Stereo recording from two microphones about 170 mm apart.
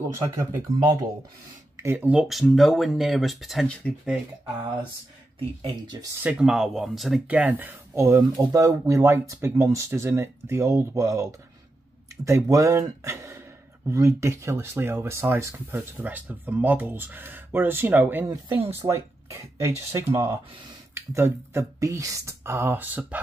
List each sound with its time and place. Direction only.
0.1 s speech: 15° right (ahead or behind); by 4.1 s 5° left (ahead or behind)
5.4 s speech: 30° right (ahead or behind)
6.2 s speech: 5° right (ahead or behind)
12.3 s speech: 15° right (ahead or behind)